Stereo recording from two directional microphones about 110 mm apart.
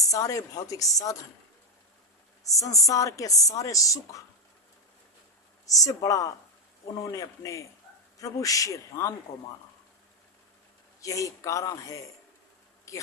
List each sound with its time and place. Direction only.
0.1 s a woman's voice: 30° left (ahead or behind)
2.5 s a woman's voice: 30° left (ahead or behind)
5.6 s a woman's voice: 30° left (ahead or behind)
11.0 s a woman's voice: 30° left (ahead or behind)